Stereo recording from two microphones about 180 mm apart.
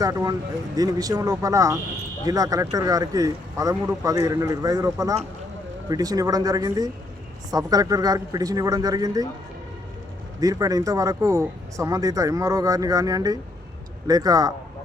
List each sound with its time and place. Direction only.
0.0 s speech: 20° right (ahead or behind)
10.4 s speech: 20° right (ahead or behind)